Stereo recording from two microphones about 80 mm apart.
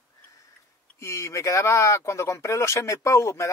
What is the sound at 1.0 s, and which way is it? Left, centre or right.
Speech, left.